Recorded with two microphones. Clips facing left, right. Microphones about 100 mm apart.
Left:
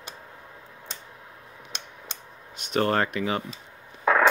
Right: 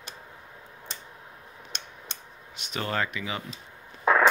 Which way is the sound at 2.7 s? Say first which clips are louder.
Left 6 dB; 50° left (ahead or behind).